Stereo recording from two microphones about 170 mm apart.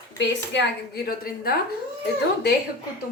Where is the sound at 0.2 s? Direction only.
90° left; by 1.5 s 60° left (ahead or behind).